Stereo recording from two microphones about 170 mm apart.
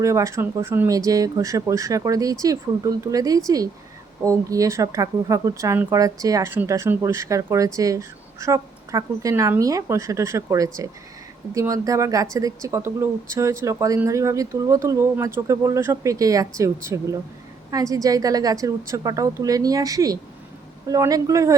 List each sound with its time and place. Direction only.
0.0 s speech: 15° right (ahead or behind)